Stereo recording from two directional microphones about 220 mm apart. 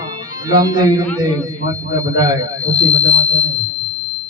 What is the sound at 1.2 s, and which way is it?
A man's voice, 20° right (ahead or behind).